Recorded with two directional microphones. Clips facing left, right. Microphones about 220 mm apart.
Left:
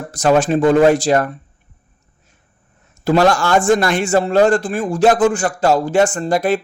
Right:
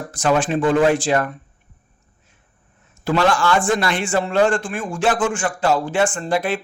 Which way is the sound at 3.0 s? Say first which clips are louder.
Left 4 dB; 40° left (ahead or behind).